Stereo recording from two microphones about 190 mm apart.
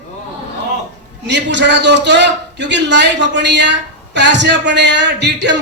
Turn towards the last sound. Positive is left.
turn(degrees=-65)  # may be behind; listen again after turning